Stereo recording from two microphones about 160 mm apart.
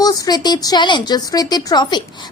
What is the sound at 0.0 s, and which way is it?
A woman's voice, 25° left (ahead or behind).